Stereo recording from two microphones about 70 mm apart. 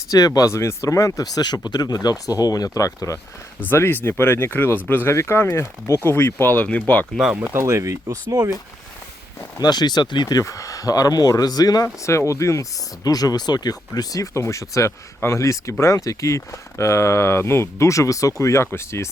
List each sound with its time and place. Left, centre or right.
0.1 s speech: left
3.7 s speech: left
7.5 s speech: right
8.3 s speech: right
9.6 s speech: left
10.4 s speech: left
12.0 s speech: left
13.1 s speech: left
14.3 s speech: left